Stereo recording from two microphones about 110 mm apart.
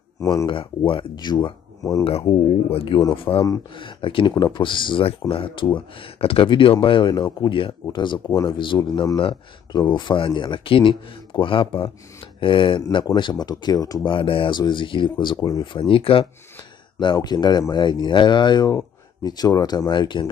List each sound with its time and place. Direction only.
0.2 s speech: 30° left (ahead or behind)
0.5 s speech: 50° left (ahead or behind); by 2.0 s 30° left (ahead or behind)
2.0 s speech: 60° left (ahead or behind); by 8.2 s 45° left (ahead or behind)
8.3 s speech: 30° left (ahead or behind)
9.2 s speech: 50° left (ahead or behind)
14.0 s speech: 55° left (ahead or behind)
15.6 s speech: 50° left (ahead or behind)
17.0 s speech: 40° left (ahead or behind)